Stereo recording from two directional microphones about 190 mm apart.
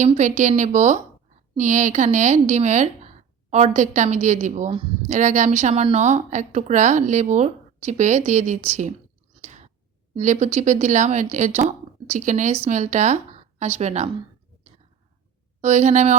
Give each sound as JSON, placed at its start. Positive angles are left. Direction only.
{"t": 0.0, "sound": "a woman's voice", "side_deg": -40}
{"t": 9.4, "sound": "clicking", "side_deg": -35}
{"t": 10.2, "sound": "a woman's voice", "side_deg": -40}
{"t": 15.6, "sound": "a woman's voice", "side_deg": -40}